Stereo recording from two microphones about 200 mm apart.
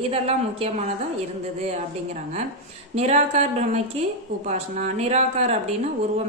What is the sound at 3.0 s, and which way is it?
A woman's voice, 35° right (ahead or behind).